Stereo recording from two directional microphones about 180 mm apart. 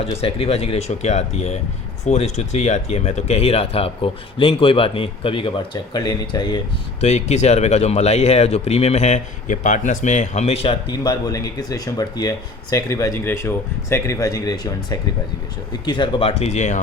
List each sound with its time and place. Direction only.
0.0 s speech: 30° left (ahead or behind)
7.0 s speech: 40° left (ahead or behind)